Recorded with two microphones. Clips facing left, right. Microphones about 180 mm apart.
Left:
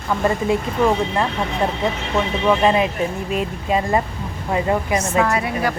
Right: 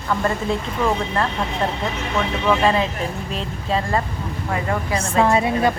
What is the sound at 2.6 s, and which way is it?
Speech, 15° left (ahead or behind).